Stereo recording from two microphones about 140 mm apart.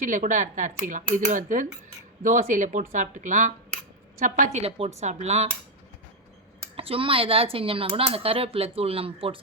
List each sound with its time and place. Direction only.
0.0 s speech: 65° right (ahead or behind)
6.7 s speech: 40° right (ahead or behind)